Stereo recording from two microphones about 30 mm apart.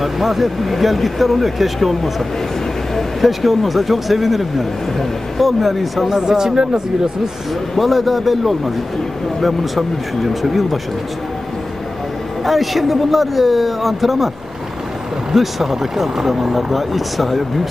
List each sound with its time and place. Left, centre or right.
0.0 s speech: centre
3.3 s speech: centre
6.0 s speech: centre
7.7 s speech: centre
12.4 s speech: centre
15.3 s speech: centre